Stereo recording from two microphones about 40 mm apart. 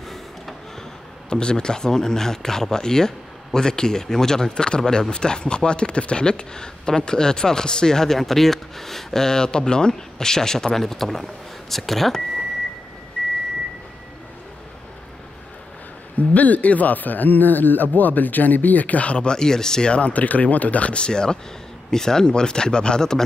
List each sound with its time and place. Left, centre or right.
1.3 s speech: left; by 12.2 s centre
13.2 s vehicle: left
16.2 s speech: left; by 19.9 s centre
19.9 s speech: left; by 23.2 s centre